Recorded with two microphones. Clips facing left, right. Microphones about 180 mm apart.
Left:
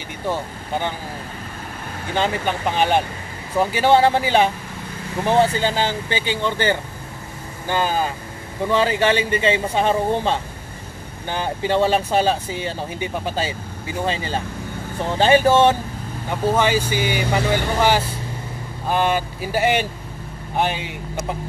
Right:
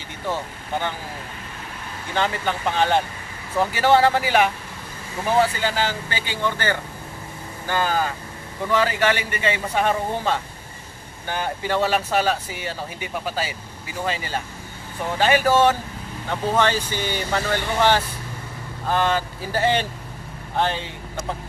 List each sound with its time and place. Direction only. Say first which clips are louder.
0.3 s speech: left 2 dB; 15° left (ahead or behind)
2.1 s speech: left 2 dB; 20° left (ahead or behind)
16.3 s speech: left 2 dB; 10° left (ahead or behind)